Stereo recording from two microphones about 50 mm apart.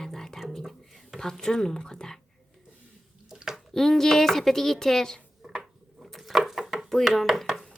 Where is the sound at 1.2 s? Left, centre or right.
Centre.